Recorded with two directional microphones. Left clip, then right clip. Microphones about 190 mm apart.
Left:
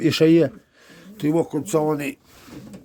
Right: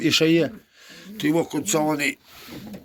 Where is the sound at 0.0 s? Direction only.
60° left (ahead or behind).